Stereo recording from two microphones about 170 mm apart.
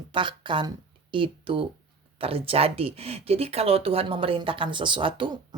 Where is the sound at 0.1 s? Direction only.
30° right (ahead or behind).